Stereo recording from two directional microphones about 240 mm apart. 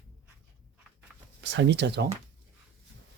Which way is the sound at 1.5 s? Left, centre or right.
Right.